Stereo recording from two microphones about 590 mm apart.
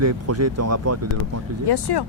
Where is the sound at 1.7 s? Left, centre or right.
Left.